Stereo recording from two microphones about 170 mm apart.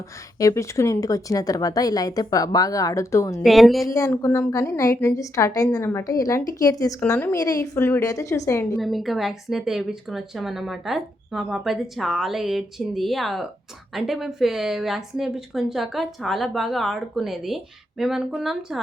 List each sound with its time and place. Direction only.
0.3 s speech: 20° left (ahead or behind)
3.4 s speech: centre (ahead or behind)
3.8 s speech: 20° left (ahead or behind)
8.8 s speech: centre (ahead or behind)